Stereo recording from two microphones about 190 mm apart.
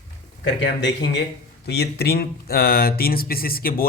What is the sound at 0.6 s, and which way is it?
Speech, 65° left (ahead or behind).